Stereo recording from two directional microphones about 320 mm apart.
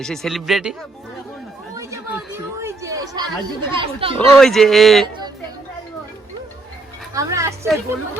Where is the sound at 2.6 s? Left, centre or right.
Centre.